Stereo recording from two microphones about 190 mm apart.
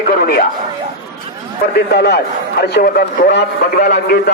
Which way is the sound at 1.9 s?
60° left (ahead or behind).